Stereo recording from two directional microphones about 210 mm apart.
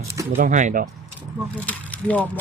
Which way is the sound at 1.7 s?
5° left (ahead or behind).